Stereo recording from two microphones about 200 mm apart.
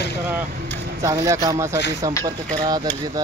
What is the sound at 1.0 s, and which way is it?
Speech, 15° right (ahead or behind).